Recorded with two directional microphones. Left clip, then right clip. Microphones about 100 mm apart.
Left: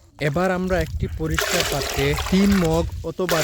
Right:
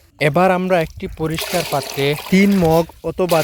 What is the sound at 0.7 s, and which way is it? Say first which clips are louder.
Speech: right 6 dB; 25° right (ahead or behind).